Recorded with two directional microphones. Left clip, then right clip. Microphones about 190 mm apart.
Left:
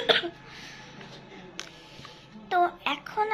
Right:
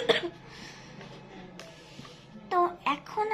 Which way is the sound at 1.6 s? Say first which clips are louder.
Left 9 dB; 50° left (ahead or behind).